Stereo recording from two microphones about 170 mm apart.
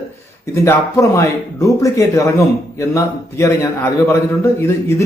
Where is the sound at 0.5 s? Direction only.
15° left (ahead or behind).